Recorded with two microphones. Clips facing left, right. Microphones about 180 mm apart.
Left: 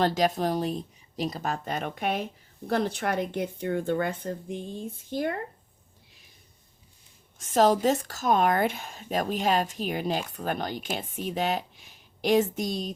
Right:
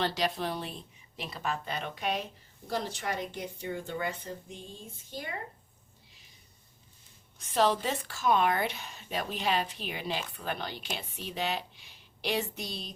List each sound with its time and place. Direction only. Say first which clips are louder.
0.0 s a woman's voice: left 7 dB; 45° left (ahead or behind)
7.3 s a woman's voice: left 5 dB; 45° left (ahead or behind)